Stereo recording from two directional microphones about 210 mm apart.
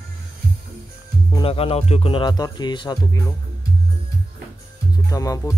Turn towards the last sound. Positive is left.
turn(degrees=15)  # may be behind; listen again after turning